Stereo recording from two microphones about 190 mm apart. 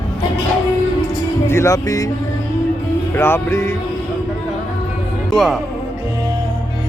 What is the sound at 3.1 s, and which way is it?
Speech, 10° left (ahead or behind).